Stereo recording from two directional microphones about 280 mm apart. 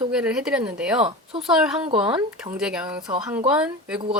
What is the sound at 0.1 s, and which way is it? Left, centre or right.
Speech, centre.